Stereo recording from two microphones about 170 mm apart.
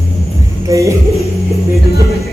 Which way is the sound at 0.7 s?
20° right (ahead or behind).